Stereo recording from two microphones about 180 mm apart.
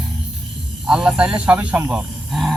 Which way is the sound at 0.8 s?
5° right (ahead or behind).